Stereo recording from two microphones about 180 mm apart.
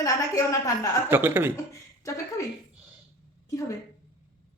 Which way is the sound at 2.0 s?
15° left (ahead or behind).